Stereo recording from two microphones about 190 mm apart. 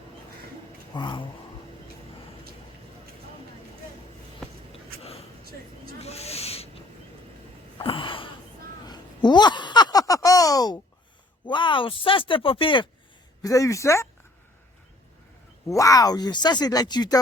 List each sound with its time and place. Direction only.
0.9 s speech: 25° left (ahead or behind)
4.7 s a sound: 30° left (ahead or behind)
11.4 s speech: 25° left (ahead or behind)
15.6 s speech: 15° left (ahead or behind)